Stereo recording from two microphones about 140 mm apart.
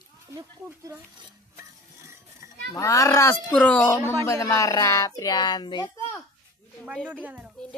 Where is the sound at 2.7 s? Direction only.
20° left (ahead or behind).